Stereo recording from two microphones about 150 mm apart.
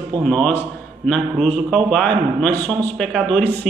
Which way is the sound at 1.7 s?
5° left (ahead or behind).